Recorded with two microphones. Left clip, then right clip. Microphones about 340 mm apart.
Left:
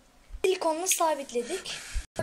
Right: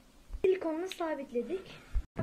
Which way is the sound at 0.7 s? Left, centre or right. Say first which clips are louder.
Left 9 dB; left.